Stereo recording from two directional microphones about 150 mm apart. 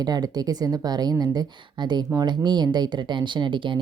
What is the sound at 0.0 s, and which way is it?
Speech, 25° right (ahead or behind).